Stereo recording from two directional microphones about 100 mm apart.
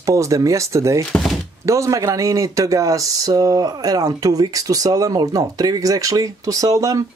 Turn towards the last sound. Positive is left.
turn(degrees=-35)  # may be behind; listen again after turning